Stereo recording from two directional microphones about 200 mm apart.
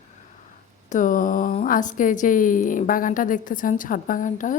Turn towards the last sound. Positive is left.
turn(degrees=40)  # may be behind; listen again after turning